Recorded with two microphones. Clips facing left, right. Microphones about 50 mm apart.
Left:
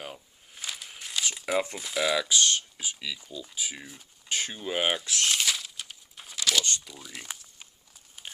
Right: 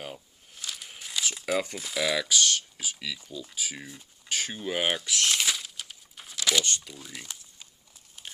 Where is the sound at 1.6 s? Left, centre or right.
Left.